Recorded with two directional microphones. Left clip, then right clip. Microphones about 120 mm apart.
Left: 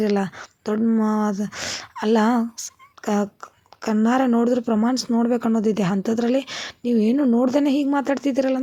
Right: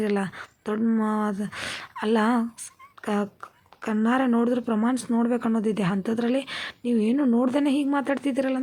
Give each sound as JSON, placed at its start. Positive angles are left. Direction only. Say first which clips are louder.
{"t": 0.0, "sound": "speech", "louder": "left 4 dB", "side_deg": 40}